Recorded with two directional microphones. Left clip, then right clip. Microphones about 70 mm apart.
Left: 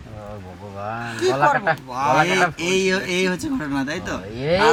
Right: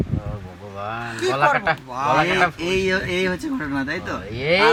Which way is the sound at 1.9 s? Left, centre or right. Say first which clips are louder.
Left 1 dB; left.